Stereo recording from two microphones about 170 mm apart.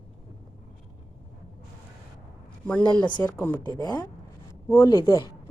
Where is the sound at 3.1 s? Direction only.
25° left (ahead or behind).